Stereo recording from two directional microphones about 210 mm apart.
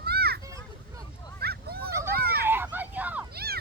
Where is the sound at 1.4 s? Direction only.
50° right (ahead or behind).